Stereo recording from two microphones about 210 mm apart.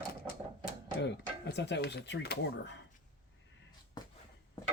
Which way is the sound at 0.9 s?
50° left (ahead or behind).